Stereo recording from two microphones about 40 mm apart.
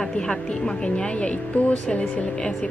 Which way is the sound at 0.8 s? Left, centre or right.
Left.